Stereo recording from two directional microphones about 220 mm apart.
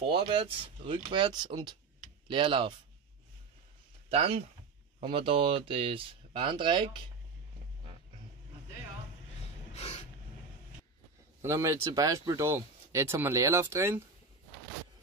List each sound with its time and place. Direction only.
0.0 s speech: 25° right (ahead or behind)
4.1 s speech: 25° right (ahead or behind)
9.8 s a sound: 30° left (ahead or behind)
11.4 s speech: 15° right (ahead or behind)